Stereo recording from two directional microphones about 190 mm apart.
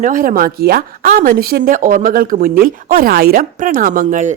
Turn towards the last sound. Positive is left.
turn(degrees=-45)  # may be behind; listen again after turning